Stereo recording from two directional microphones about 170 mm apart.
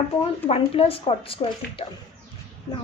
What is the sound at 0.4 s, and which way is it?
Speech, 35° left (ahead or behind).